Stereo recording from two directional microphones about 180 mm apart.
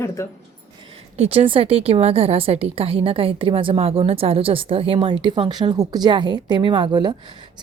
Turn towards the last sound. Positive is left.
turn(degrees=-25)  # may be behind; listen again after turning